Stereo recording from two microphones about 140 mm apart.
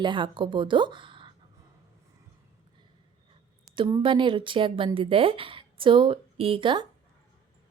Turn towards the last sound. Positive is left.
turn(degrees=-35)  # may be behind; listen again after turning